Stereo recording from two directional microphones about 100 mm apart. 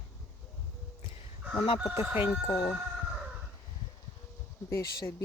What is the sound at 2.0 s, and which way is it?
Speech, 20° right (ahead or behind).